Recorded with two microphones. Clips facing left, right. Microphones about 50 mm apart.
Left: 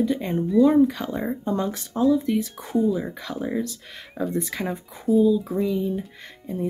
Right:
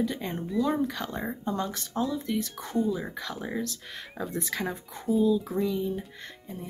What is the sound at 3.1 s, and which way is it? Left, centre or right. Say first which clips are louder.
Speech: left 6 dB; centre.